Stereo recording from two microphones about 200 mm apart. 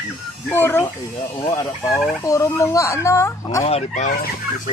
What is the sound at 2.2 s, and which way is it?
Speech, 15° left (ahead or behind).